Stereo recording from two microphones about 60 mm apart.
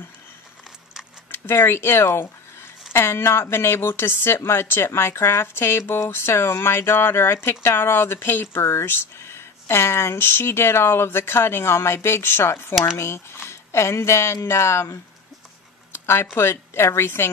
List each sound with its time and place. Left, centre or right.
1.3 s speech: left
15.9 s a sound: left
16.3 s speech: left